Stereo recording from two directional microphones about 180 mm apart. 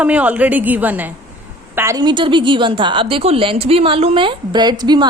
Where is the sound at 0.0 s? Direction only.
5° right (ahead or behind).